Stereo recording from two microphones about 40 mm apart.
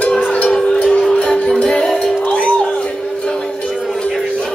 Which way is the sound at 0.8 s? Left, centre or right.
Centre.